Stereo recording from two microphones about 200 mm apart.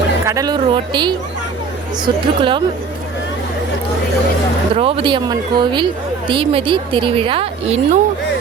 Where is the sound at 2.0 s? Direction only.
25° right (ahead or behind).